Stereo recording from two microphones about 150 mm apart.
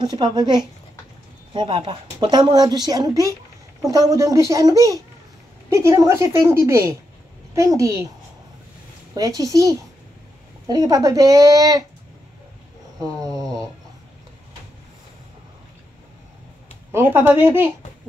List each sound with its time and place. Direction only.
0.0 s a woman's voice: 30° right (ahead or behind)
9.1 s a woman's voice: 25° right (ahead or behind)
13.0 s a sound: 25° right (ahead or behind)
16.9 s speech: 15° right (ahead or behind)